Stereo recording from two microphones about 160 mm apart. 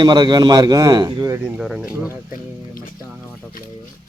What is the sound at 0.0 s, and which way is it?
A man's voice, 25° right (ahead or behind).